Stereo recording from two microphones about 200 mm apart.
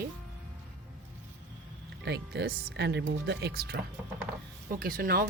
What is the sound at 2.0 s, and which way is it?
Speech, 55° right (ahead or behind).